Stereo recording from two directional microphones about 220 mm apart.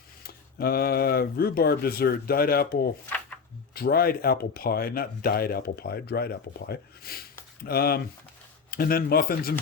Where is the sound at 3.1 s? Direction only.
5° left (ahead or behind).